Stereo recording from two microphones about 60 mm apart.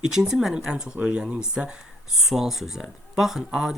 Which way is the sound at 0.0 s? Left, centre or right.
Centre.